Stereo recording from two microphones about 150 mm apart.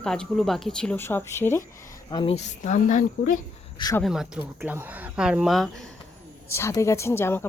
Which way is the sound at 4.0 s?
Centre (ahead or behind).